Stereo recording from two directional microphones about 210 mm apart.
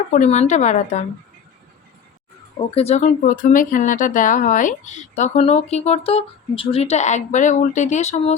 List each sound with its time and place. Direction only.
0.1 s speech: 35° left (ahead or behind)
2.6 s speech: 30° left (ahead or behind)